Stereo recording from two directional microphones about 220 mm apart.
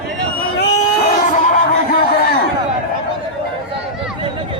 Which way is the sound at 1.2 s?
35° left (ahead or behind).